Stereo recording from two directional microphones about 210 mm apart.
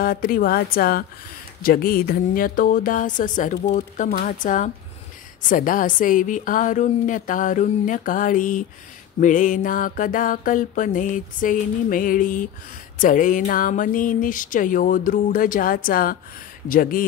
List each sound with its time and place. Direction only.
0.0 s a woman's voice: 45° left (ahead or behind)
1.6 s music: 45° left (ahead or behind)